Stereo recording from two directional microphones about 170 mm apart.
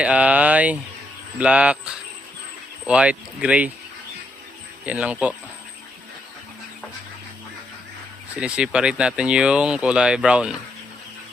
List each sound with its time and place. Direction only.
0.0 s speech: 5° right (ahead or behind)
4.9 s speech: 10° right (ahead or behind)
8.4 s speech: 5° right (ahead or behind)